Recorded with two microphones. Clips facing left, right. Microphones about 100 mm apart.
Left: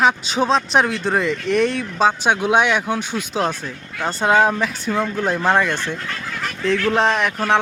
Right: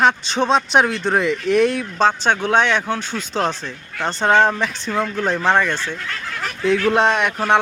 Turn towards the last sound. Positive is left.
turn(degrees=0)  # may be behind; listen again after turning